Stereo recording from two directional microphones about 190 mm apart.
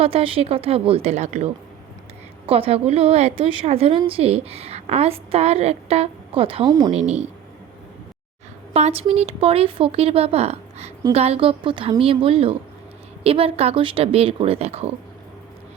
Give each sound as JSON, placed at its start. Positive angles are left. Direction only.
{"t": 0.0, "sound": "a woman's voice", "side_deg": -30}
{"t": 2.5, "sound": "a woman's voice", "side_deg": -30}
{"t": 6.9, "sound": "a woman's voice", "side_deg": -35}
{"t": 8.7, "sound": "a woman's voice", "side_deg": -30}